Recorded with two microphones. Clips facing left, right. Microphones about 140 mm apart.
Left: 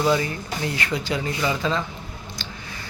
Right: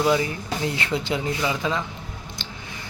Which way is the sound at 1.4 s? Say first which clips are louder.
Left 1 dB; 10° right (ahead or behind).